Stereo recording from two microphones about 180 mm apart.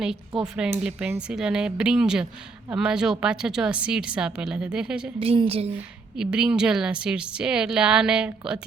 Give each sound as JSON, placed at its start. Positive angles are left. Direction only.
{"t": 0.0, "sound": "speech", "side_deg": -5}
{"t": 5.2, "sound": "a woman's voice", "side_deg": -35}
{"t": 6.1, "sound": "speech", "side_deg": -5}